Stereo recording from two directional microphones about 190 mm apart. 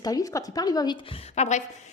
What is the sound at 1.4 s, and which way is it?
Speech, 40° left (ahead or behind).